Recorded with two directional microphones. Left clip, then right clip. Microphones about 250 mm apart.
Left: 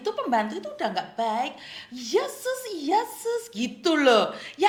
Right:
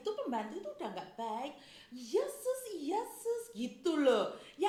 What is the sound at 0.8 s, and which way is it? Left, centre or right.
Speech, left.